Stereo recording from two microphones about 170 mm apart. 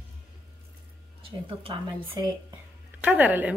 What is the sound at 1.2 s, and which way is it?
A woman's voice, 30° right (ahead or behind).